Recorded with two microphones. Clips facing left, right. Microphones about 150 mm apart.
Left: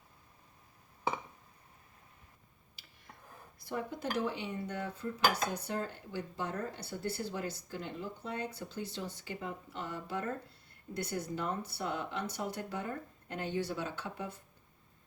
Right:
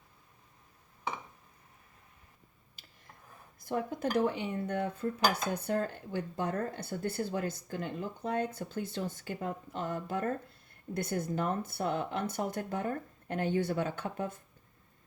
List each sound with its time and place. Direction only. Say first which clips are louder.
3.6 s dishes: right 5 dB; 50° right (ahead or behind)